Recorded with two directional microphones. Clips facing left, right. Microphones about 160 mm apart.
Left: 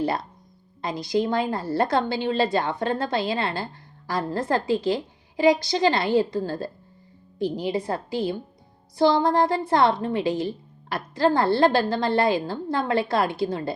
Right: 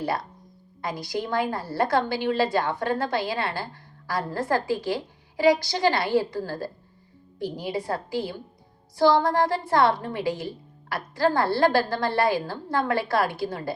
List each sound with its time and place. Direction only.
0.8 s a woman's voice: 20° left (ahead or behind)